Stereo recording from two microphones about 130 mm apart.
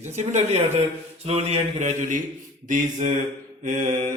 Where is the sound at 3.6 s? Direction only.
80° right.